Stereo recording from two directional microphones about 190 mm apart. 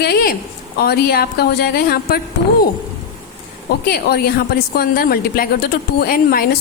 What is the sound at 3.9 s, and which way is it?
A woman's voice, 55° left (ahead or behind).